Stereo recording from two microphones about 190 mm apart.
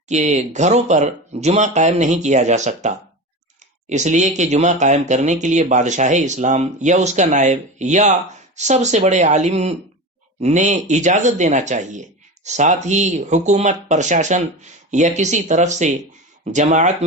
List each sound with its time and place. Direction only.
0.1 s speech: 40° right (ahead or behind)